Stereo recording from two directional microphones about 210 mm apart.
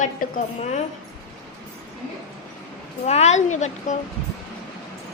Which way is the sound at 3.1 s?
30° left (ahead or behind).